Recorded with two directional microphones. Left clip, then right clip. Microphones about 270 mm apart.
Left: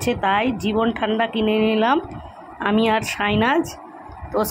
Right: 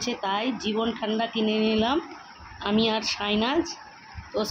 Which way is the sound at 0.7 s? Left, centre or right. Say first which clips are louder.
Left 8 dB; centre.